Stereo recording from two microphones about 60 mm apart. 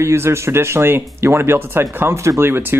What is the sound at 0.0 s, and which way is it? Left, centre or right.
Speech, right.